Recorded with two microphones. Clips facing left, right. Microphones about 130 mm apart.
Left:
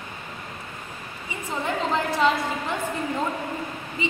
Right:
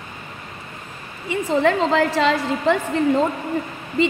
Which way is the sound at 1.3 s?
90° right.